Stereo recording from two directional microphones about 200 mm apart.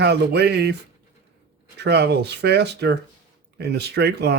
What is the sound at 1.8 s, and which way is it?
Speech, 55° right (ahead or behind).